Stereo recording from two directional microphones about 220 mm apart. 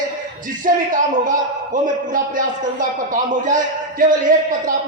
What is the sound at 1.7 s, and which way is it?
Speech, 35° right (ahead or behind).